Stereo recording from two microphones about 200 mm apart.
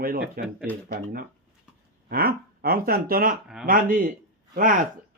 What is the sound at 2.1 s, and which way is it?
Speech, 50° right (ahead or behind).